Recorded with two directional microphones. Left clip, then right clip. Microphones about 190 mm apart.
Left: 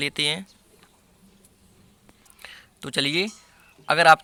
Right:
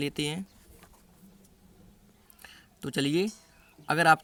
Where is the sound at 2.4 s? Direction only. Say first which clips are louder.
Left 3 dB; 20° right (ahead or behind).